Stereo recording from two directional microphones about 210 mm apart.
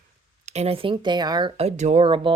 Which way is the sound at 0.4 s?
30° right (ahead or behind).